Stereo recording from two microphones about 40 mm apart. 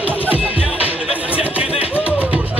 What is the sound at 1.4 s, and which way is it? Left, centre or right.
Music, right.